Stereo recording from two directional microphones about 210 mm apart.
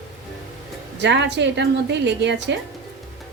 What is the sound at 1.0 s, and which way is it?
A woman's voice, 55° right (ahead or behind).